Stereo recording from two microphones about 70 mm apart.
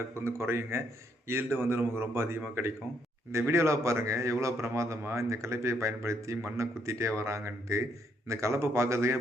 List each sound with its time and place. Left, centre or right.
0.0 s a man's voice: right